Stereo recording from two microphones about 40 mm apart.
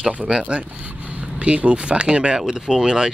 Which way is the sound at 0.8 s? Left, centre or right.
Right.